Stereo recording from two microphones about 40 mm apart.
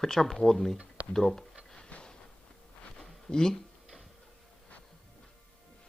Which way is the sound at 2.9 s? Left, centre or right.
Centre.